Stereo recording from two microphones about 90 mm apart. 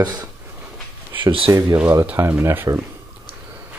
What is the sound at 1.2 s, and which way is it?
Speech, 80° right.